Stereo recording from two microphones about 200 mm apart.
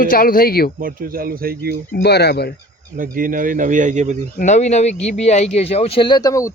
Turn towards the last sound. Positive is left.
turn(degrees=15)  # may be behind; listen again after turning